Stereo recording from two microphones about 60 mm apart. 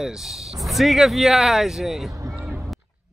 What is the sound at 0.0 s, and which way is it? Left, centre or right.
Speech, centre.